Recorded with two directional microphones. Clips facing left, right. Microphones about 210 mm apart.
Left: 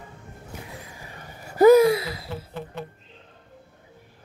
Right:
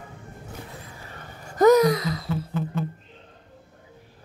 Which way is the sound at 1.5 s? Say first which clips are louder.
Left 2 dB; 10° left (ahead or behind).